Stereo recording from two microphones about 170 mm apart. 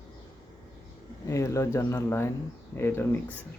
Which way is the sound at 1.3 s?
20° left (ahead or behind).